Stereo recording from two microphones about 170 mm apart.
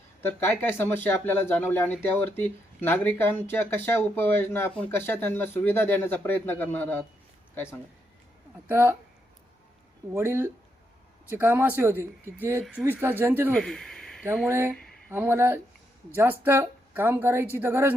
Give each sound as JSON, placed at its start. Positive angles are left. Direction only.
{"t": 0.2, "sound": "speech", "side_deg": 10}
{"t": 8.6, "sound": "speech", "side_deg": -15}
{"t": 10.2, "sound": "speech", "side_deg": -15}
{"t": 13.5, "sound": "a sound", "side_deg": 5}
{"t": 15.1, "sound": "speech", "side_deg": -15}